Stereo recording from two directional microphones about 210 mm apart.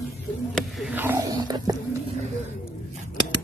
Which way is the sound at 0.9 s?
10° right (ahead or behind).